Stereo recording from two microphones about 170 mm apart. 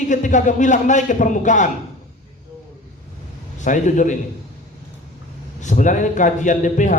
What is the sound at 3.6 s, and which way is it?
Speech, 45° left (ahead or behind).